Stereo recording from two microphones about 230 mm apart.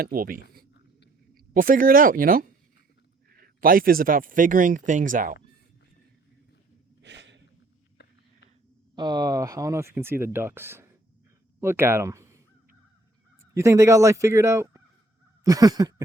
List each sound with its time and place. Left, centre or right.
0.0 s speech: right
1.5 s speech: right
7.0 s a sound: right
8.0 s a sound: left
9.0 s speech: centre
13.4 s speech: centre